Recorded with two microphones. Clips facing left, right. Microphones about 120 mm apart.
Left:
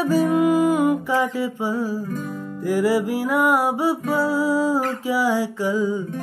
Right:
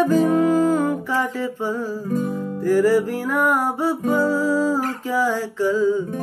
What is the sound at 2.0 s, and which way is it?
Music, 35° right (ahead or behind).